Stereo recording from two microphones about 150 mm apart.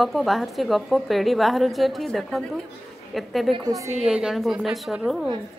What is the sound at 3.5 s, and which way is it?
Speech, 25° right (ahead or behind).